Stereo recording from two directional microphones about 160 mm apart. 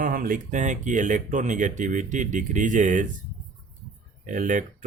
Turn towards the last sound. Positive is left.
turn(degrees=-50)  # may be behind; listen again after turning